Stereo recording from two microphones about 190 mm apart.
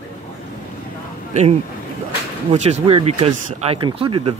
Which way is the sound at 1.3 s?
35° right (ahead or behind).